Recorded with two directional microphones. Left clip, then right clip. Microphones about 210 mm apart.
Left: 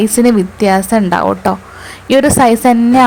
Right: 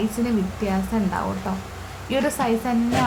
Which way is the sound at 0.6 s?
45° left (ahead or behind).